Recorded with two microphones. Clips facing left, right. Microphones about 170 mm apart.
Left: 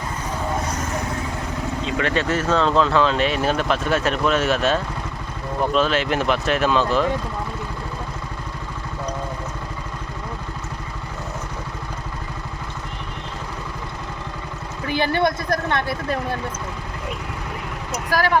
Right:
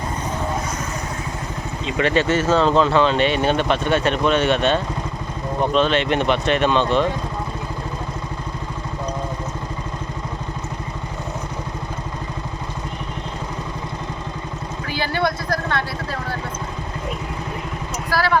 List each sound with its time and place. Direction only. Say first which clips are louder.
2.0 s speech: right 5 dB; centre (ahead or behind)
14.8 s vehicle: left 4 dB; 55° left (ahead or behind)
15.1 s speech: right 1 dB; 20° left (ahead or behind)
18.1 s speech: left 1 dB; 15° left (ahead or behind)